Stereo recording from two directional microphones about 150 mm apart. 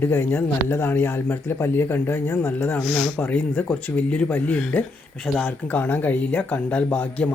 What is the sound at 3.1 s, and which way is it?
Speech, 10° left (ahead or behind).